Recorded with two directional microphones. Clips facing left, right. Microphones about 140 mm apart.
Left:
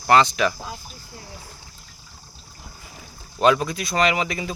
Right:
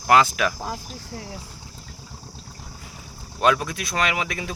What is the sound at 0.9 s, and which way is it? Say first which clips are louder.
Speech: right 7 dB; 90° right.